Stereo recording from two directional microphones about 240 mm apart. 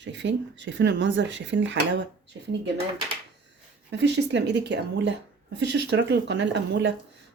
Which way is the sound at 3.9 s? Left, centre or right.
Right.